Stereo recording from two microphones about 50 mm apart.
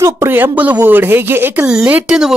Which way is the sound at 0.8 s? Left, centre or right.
Right.